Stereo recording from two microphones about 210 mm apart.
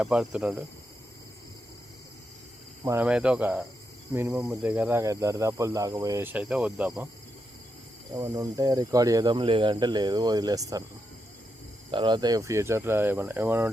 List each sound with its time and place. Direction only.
0.0 s cricket: 5° right (ahead or behind)
2.8 s speech: 10° right (ahead or behind)
8.1 s speech: 15° right (ahead or behind)
11.9 s speech: 20° right (ahead or behind)